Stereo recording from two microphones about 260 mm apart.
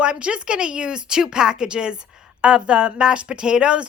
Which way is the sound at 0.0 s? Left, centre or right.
Centre.